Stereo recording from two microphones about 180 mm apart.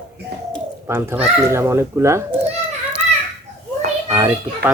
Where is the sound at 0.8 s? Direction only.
10° right (ahead or behind).